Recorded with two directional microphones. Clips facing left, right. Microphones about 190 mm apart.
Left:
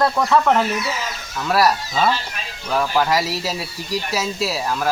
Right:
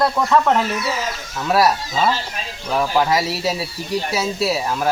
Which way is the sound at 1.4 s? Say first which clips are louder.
Right 1 dB; 20° right (ahead or behind).